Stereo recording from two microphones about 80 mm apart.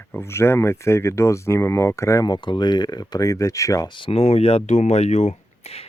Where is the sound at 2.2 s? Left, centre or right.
Left.